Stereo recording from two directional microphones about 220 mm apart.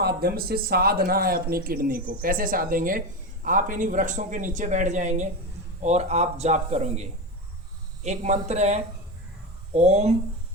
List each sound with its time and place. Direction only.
0.0 s speech: 45° right (ahead or behind)